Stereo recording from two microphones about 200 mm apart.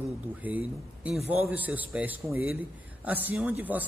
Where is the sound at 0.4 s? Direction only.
10° right (ahead or behind).